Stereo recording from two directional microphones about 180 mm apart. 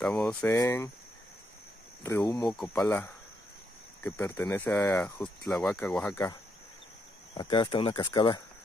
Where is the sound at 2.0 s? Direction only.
20° left (ahead or behind).